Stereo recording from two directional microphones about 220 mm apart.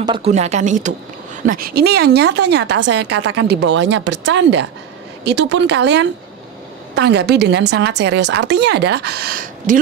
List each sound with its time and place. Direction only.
0.0 s a woman's voice: 25° right (ahead or behind)